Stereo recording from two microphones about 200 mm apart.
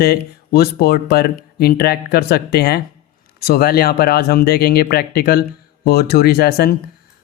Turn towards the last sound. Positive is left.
turn(degrees=50)  # may be behind; listen again after turning